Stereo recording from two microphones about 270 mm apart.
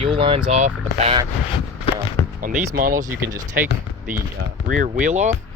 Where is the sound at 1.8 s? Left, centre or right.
Centre.